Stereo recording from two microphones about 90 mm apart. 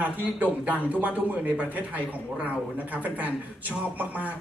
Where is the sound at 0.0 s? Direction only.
15° right (ahead or behind).